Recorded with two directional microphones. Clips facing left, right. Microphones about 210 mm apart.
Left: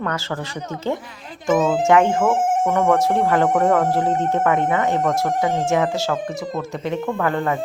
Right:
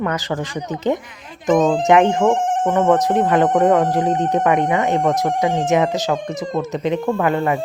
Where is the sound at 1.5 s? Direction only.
5° left (ahead or behind).